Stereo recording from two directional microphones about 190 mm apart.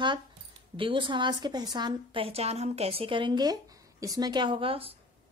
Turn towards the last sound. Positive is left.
turn(degrees=-30)  # may be behind; listen again after turning